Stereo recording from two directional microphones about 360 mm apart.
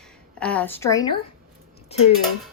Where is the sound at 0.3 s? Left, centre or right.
Centre.